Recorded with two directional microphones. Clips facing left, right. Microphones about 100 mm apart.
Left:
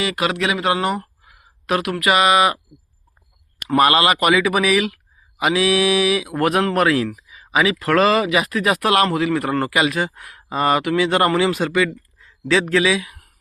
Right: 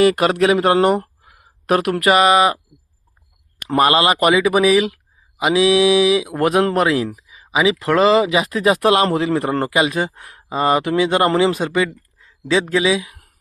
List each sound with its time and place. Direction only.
0.0 s speech: 45° right (ahead or behind)
1.2 s speech: 40° right (ahead or behind)
3.7 s speech: 25° right (ahead or behind)